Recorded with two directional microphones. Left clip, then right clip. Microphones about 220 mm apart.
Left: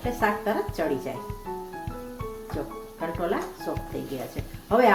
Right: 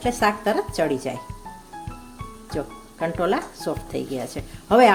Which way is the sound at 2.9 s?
45° right (ahead or behind).